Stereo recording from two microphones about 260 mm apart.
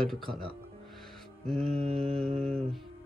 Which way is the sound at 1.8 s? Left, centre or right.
Right.